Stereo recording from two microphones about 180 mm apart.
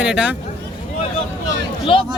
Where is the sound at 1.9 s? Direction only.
30° left (ahead or behind).